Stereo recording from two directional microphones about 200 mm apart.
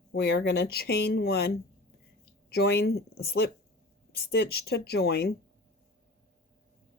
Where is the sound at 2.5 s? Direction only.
55° left (ahead or behind).